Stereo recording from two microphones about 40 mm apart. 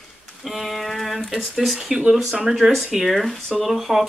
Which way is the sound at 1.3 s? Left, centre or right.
Centre.